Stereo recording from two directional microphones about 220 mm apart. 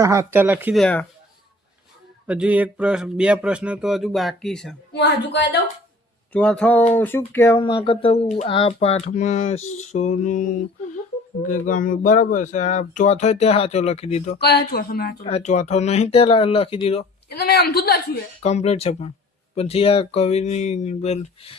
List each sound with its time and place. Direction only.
0.0 s speech: 15° right (ahead or behind); by 1.0 s 5° left (ahead or behind)
2.2 s speech: 5° right (ahead or behind)
4.9 s speech: 50° left (ahead or behind)
6.3 s speech: 5° left (ahead or behind); by 14.3 s 30° left (ahead or behind)
14.3 s speech: 45° left (ahead or behind)
15.3 s speech: 30° left (ahead or behind)
17.2 s speech: 45° left (ahead or behind)
18.4 s speech: 30° left (ahead or behind)